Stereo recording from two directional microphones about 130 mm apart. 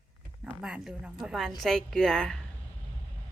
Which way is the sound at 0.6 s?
5° right (ahead or behind).